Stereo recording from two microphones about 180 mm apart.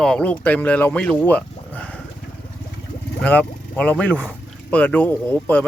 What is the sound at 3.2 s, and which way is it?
Speech, 5° left (ahead or behind).